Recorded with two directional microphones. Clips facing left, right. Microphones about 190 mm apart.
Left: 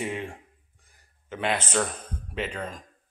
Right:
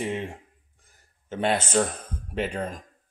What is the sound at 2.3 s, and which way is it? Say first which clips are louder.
Speech: right 4 dB; 40° right (ahead or behind).